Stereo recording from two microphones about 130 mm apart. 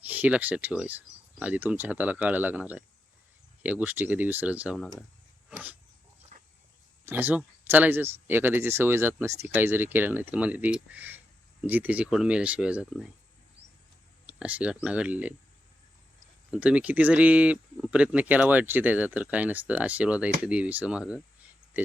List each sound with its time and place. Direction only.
0.0 s speech: 15° right (ahead or behind)
5.5 s a sound: 10° right (ahead or behind)
6.3 s dog: 90° right
7.0 s speech: 15° right (ahead or behind)
14.3 s speech: 10° right (ahead or behind)
16.5 s speech: 10° right (ahead or behind)